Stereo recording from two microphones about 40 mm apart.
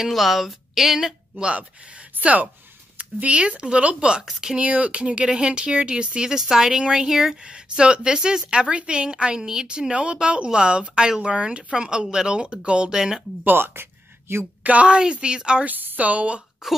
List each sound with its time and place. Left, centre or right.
0.0 s a woman's voice: centre
1.4 s speech: right
12.9 s speech: centre
13.6 s a sound: right
14.6 s a woman's voice: right
14.9 s speech: right
15.6 s a woman's voice: right
16.0 s speech: right